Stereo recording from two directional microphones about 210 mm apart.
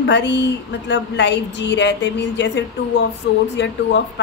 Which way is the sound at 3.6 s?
55° left (ahead or behind).